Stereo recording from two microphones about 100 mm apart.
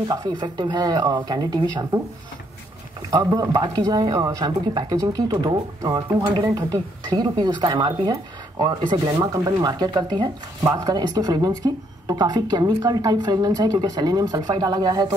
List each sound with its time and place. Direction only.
0.1 s speech: 45° right (ahead or behind)
3.1 s speech: 35° right (ahead or behind)